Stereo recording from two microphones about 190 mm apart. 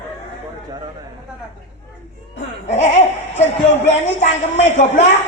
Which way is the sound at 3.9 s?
40° left (ahead or behind).